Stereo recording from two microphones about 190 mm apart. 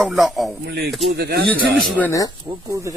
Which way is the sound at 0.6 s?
60° right (ahead or behind).